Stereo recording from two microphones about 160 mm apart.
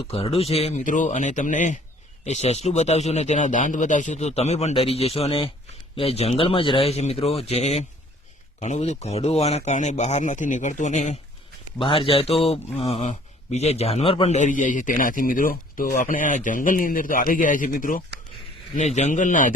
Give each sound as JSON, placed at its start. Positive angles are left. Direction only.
{"t": 0.0, "sound": "a man's voice", "side_deg": 35}
{"t": 11.8, "sound": "a man's voice", "side_deg": 35}
{"t": 14.3, "sound": "speech", "side_deg": 50}